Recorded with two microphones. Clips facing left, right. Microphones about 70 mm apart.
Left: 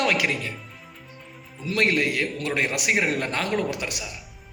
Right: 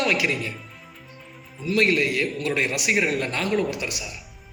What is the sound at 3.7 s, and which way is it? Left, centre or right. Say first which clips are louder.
Speech: even; left.